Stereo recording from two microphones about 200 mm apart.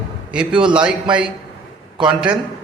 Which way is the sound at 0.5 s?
25° right (ahead or behind).